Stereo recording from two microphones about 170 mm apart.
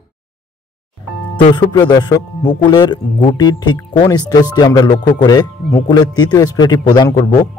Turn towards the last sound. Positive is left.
turn(degrees=25)  # may be behind; listen again after turning